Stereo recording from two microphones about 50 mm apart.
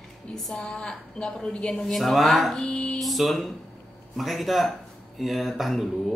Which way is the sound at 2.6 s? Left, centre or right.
Left.